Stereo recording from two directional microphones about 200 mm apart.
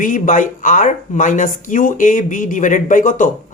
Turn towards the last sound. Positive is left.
turn(degrees=40)  # may be behind; listen again after turning